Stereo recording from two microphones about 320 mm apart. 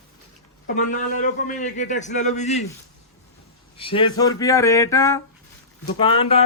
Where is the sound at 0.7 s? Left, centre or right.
Left.